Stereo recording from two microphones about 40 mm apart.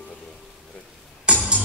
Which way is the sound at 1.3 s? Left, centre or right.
Right.